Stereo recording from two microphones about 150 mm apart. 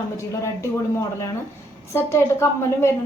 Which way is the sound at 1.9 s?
15° left (ahead or behind).